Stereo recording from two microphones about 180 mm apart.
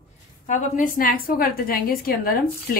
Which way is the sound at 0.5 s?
50° left (ahead or behind).